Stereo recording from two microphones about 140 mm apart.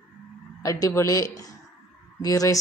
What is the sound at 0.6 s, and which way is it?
A man's voice, 25° left (ahead or behind).